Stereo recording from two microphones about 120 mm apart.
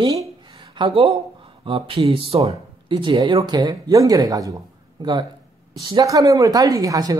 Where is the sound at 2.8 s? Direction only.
40° right (ahead or behind).